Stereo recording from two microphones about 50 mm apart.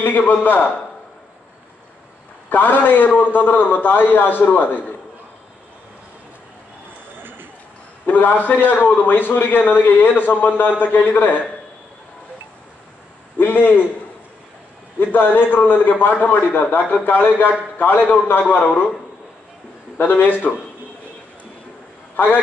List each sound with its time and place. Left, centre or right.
0.0 s a man's voice: left
2.5 s a man's voice: left
7.2 s a sound: right
8.0 s a man's voice: left
13.4 s a man's voice: left
15.1 s a man's voice: left
20.0 s a man's voice: left
22.1 s a man's voice: left